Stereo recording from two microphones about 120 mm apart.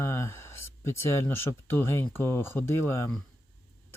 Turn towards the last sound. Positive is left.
turn(degrees=20)  # may be behind; listen again after turning